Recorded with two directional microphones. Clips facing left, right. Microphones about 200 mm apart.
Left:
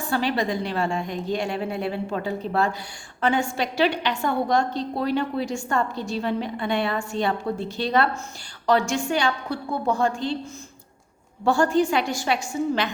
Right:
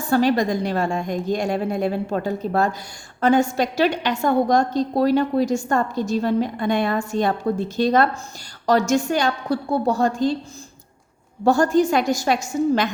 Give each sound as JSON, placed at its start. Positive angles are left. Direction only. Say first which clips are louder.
{"t": 0.1, "sound": "a woman's voice", "louder": "right 6 dB", "side_deg": -45}
{"t": 11.4, "sound": "a woman's voice", "louder": "right 3 dB", "side_deg": -40}